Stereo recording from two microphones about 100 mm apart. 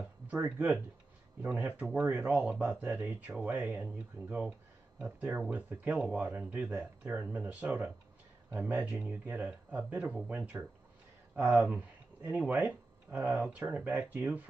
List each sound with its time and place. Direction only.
0.0 s speech: 15° right (ahead or behind)